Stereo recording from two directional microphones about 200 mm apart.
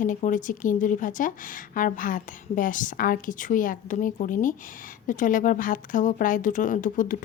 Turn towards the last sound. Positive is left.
turn(degrees=40)  # may be behind; listen again after turning